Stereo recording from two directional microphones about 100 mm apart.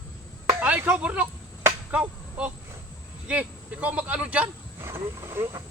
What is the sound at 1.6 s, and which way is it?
Finger snapping, 15° right (ahead or behind).